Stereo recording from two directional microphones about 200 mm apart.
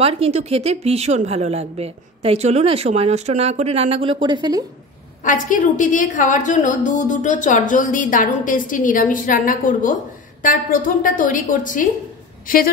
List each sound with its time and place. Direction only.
0.0 s a woman's voice: 30° right (ahead or behind)
5.2 s a woman's voice: 40° left (ahead or behind)